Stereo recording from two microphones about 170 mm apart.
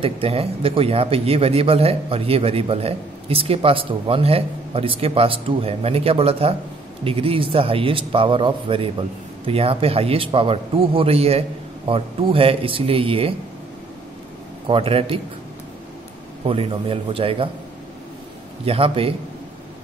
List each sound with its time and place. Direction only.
0.0 s a man's voice: 35° right (ahead or behind)
14.7 s a man's voice: 35° right (ahead or behind)
16.4 s a man's voice: 35° right (ahead or behind)
18.7 s a man's voice: 35° right (ahead or behind)